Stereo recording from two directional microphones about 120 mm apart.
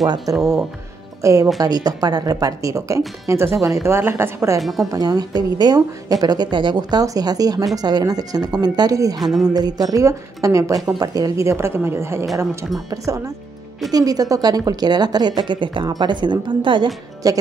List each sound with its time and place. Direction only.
0.3 s a woman's voice: 30° right (ahead or behind)
4.6 s a woman's voice: centre (ahead or behind)
4.9 s a woman's voice: 35° right (ahead or behind)
9.2 s a woman's voice: centre (ahead or behind)
9.5 s a woman's voice: 35° right (ahead or behind)